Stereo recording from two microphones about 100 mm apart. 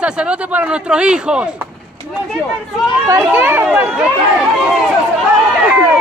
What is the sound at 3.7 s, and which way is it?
Speech, 10° right (ahead or behind).